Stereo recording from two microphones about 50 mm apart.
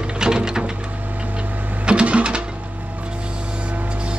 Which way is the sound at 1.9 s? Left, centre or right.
Right.